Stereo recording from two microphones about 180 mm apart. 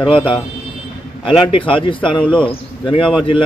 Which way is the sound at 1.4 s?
30° left (ahead or behind).